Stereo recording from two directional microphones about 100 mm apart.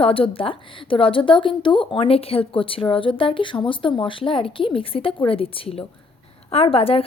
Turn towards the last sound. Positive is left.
turn(degrees=70)  # may be behind; listen again after turning